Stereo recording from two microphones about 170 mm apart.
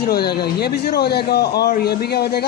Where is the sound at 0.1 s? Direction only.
65° left (ahead or behind).